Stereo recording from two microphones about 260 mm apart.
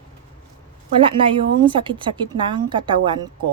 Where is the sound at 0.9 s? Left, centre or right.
Centre.